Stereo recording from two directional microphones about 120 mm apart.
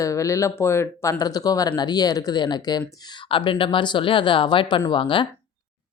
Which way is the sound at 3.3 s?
45° left (ahead or behind).